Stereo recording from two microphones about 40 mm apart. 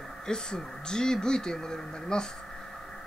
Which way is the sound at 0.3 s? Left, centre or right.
Centre.